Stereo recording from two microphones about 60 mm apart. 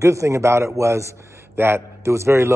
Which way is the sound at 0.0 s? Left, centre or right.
Right.